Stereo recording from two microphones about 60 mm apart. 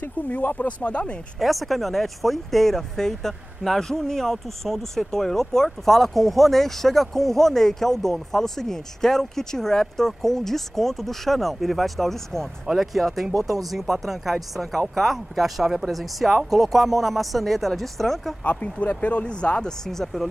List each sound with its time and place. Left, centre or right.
0.0 s speech: left
1.4 s speech: centre
18.4 s speech: left
19.9 s speech: centre